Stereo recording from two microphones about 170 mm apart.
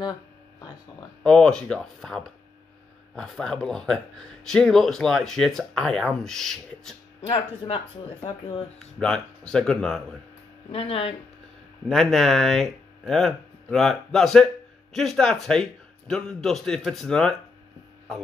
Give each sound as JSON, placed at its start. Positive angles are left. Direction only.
{"t": 1.2, "sound": "speech", "side_deg": 5}
{"t": 7.2, "sound": "speech", "side_deg": 30}
{"t": 8.7, "sound": "speech", "side_deg": 5}
{"t": 10.7, "sound": "speech", "side_deg": 35}
{"t": 11.9, "sound": "speech", "side_deg": 0}